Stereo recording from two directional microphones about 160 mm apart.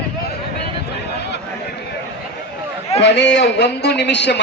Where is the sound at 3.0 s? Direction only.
90° left.